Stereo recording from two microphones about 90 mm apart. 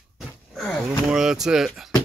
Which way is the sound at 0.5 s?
5° left (ahead or behind).